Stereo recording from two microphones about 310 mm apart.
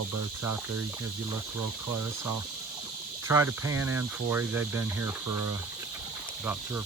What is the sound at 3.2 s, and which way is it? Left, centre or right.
Speech, centre.